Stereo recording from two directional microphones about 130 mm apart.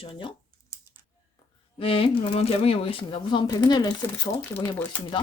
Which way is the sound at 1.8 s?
45° left (ahead or behind).